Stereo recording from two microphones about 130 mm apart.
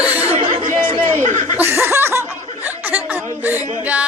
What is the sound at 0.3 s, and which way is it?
Chatter, 65° right (ahead or behind).